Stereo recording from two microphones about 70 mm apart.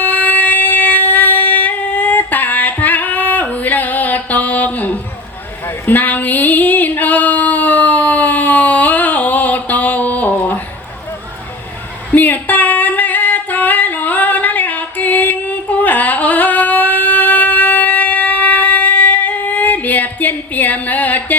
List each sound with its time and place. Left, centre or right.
0.0 s a sound: left
5.6 s female singing: left
12.1 s singing: left